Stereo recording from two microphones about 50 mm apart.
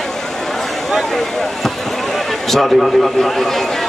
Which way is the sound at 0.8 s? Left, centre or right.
Centre.